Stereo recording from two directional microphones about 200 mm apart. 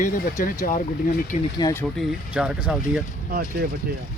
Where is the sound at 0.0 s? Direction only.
45° left (ahead or behind).